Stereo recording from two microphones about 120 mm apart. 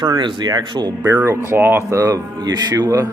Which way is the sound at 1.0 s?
20° right (ahead or behind).